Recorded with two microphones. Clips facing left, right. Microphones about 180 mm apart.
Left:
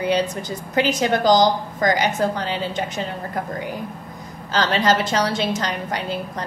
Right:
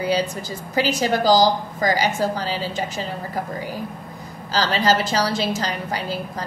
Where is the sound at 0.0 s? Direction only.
10° right (ahead or behind).